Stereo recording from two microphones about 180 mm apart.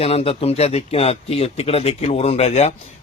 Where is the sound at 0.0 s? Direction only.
35° left (ahead or behind).